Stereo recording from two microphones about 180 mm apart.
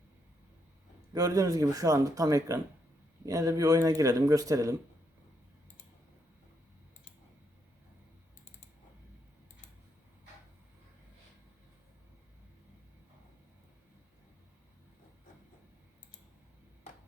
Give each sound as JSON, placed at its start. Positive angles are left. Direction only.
{"t": 1.1, "sound": "speech", "side_deg": -20}